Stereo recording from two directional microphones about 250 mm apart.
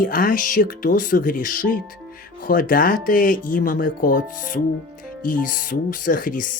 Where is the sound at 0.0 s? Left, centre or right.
Left.